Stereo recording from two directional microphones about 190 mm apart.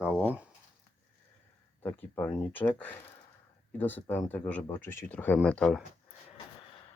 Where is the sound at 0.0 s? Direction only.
5° right (ahead or behind).